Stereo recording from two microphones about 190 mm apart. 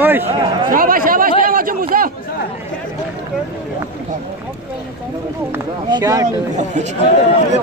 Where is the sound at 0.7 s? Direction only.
50° right (ahead or behind).